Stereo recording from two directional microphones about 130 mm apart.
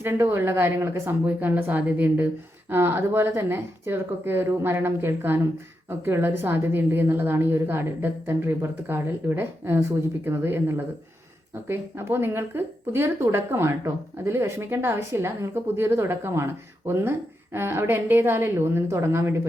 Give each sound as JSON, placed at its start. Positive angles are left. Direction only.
{"t": 0.0, "sound": "a woman's voice", "side_deg": -20}